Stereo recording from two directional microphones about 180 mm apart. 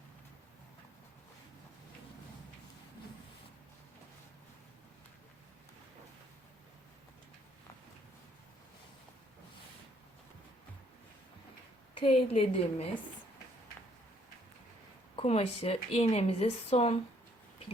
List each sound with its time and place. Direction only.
11.9 s speech: 30° left (ahead or behind)
15.1 s speech: 35° left (ahead or behind)